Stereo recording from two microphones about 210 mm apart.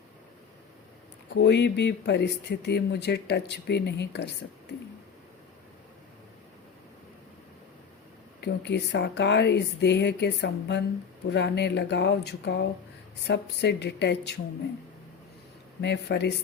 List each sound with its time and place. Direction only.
1.3 s speech: 55° left (ahead or behind)
8.4 s speech: 55° left (ahead or behind)
15.8 s speech: 55° left (ahead or behind)